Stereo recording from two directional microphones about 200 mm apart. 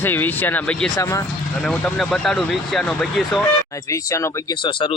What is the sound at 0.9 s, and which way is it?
Speech, 15° left (ahead or behind).